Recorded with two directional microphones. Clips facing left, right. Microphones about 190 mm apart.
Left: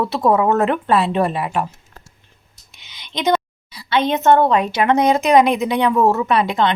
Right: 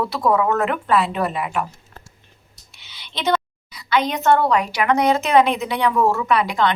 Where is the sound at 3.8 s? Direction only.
25° left (ahead or behind).